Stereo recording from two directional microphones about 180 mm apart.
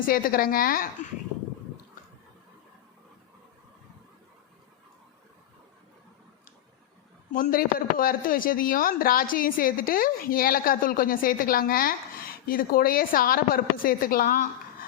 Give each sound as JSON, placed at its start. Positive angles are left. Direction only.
{"t": 0.0, "sound": "speech", "side_deg": 50}
{"t": 7.3, "sound": "speech", "side_deg": 45}